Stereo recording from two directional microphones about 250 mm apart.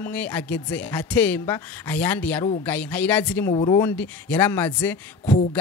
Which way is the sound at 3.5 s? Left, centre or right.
Centre.